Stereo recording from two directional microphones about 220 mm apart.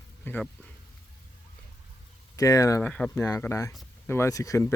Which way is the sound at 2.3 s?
15° left (ahead or behind).